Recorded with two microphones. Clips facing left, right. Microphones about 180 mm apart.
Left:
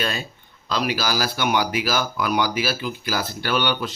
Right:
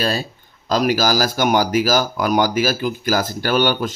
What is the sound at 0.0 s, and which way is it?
Speech, 35° right (ahead or behind).